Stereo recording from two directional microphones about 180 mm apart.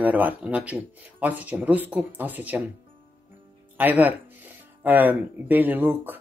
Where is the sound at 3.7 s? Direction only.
10° right (ahead or behind).